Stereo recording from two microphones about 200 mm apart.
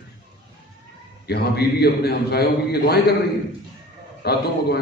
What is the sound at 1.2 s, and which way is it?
A man's voice, 55° left (ahead or behind).